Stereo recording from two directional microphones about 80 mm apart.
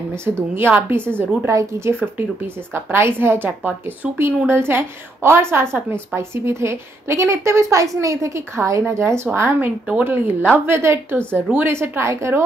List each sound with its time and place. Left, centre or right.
0.1 s a woman's voice: right
1.5 s a woman's voice: right
2.0 s a woman's voice: right
4.5 s a woman's voice: right